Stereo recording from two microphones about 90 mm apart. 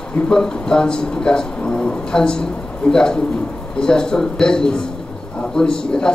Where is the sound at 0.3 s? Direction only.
5° left (ahead or behind).